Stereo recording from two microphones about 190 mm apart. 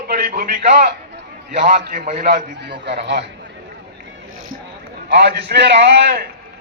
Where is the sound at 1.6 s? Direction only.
40° right (ahead or behind).